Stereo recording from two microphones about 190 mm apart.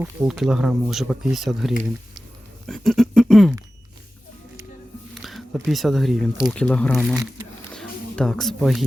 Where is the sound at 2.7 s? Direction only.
Centre (ahead or behind).